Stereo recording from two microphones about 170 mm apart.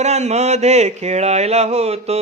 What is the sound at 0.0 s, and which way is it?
Mantra, 40° right (ahead or behind).